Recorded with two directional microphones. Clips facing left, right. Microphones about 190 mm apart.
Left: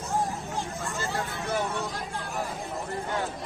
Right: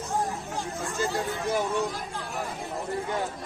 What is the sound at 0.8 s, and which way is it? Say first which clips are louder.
Speech: right 3 dB; 15° right (ahead or behind).